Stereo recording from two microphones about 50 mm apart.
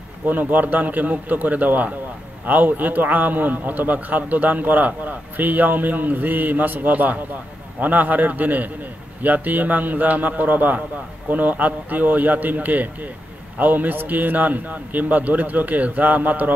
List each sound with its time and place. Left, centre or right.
0.3 s a man's voice: right